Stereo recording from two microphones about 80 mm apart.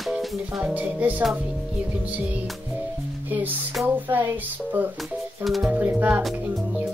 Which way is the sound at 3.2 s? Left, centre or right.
Right.